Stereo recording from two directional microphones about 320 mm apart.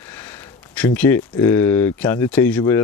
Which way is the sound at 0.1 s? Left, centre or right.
Centre.